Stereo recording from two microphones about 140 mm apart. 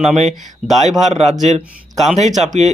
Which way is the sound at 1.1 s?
50° right (ahead or behind).